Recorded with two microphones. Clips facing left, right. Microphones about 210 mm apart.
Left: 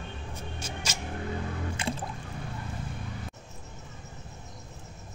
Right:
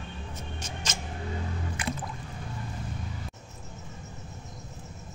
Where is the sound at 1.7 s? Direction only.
30° left (ahead or behind).